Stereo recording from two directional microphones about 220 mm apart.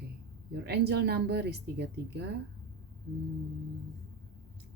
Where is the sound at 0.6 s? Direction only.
50° right (ahead or behind).